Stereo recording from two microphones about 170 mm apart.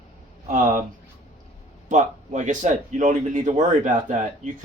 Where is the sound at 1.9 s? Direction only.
45° right (ahead or behind).